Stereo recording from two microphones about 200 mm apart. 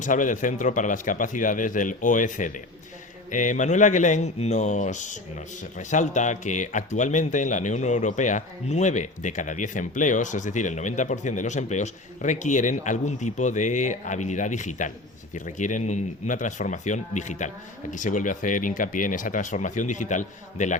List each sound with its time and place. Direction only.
0.0 s speech: 40° left (ahead or behind)